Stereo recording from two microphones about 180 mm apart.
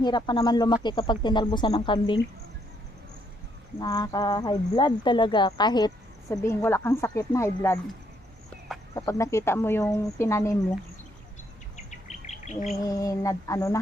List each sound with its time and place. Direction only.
0.0 s speech: 25° left (ahead or behind)
3.8 s speech: 20° left (ahead or behind)
9.0 s speech: 15° left (ahead or behind)
12.5 s bird: 40° left (ahead or behind)
12.9 s speech: 20° left (ahead or behind)